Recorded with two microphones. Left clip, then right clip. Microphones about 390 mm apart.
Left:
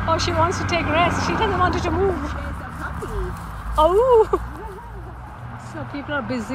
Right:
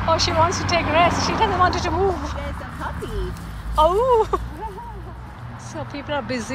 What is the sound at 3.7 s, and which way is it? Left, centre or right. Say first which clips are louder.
Speech: left 2 dB; centre.